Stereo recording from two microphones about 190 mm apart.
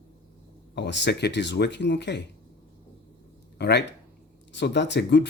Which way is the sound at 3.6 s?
60° left (ahead or behind).